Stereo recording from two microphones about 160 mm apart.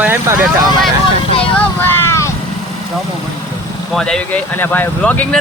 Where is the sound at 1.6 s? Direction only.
15° left (ahead or behind).